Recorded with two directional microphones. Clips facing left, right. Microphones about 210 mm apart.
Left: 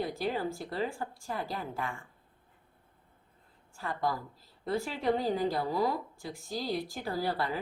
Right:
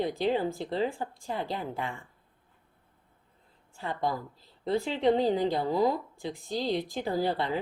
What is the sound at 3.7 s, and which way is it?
A woman's voice, 20° right (ahead or behind).